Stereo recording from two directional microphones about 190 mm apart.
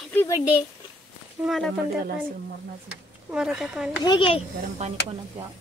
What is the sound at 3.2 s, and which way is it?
Speech, 5° right (ahead or behind).